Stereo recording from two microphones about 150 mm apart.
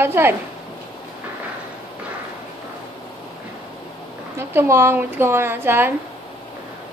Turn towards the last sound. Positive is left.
turn(degrees=-15)  # may be behind; listen again after turning